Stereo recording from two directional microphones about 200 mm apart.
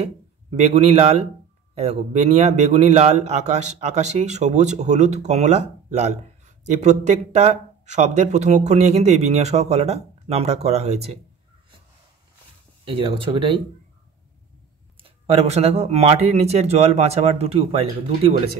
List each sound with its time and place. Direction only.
0.0 s a man's voice: 30° right (ahead or behind)
12.8 s speech: 25° right (ahead or behind)
15.0 s a man's voice: 30° right (ahead or behind)